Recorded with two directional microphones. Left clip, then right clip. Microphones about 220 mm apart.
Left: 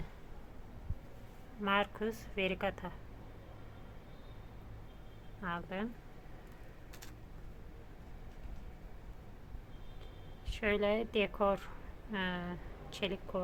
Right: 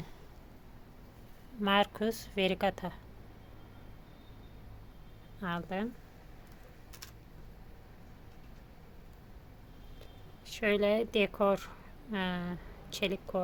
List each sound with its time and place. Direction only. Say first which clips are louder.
1.6 s a woman's voice: right 4 dB; 40° right (ahead or behind)
5.4 s a woman's voice: right 3 dB; 45° right (ahead or behind)
10.4 s speech: right 4 dB; 35° right (ahead or behind)